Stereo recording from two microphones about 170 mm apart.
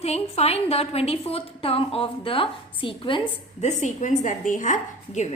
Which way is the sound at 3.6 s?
45° left (ahead or behind).